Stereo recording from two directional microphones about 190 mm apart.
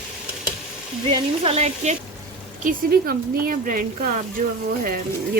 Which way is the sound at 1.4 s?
35° right (ahead or behind).